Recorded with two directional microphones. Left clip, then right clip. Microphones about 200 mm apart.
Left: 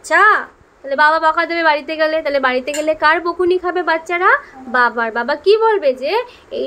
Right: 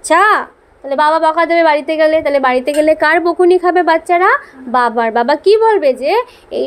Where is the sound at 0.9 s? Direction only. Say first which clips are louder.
Right 1 dB; 15° right (ahead or behind).